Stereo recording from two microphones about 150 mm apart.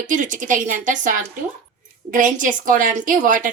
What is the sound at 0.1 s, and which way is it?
A woman's voice, 60° right (ahead or behind).